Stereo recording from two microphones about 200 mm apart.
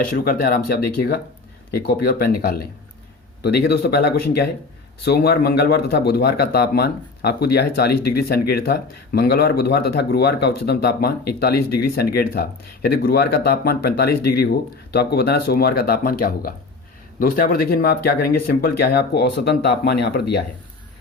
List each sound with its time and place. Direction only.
0.0 s a man's voice: 45° left (ahead or behind)